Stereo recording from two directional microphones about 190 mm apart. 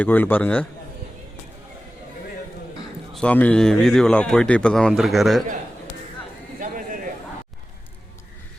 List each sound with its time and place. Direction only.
0.0 s a man's voice: 10° left (ahead or behind)
3.1 s speech: 5° left (ahead or behind)
6.6 s a sound: 45° right (ahead or behind)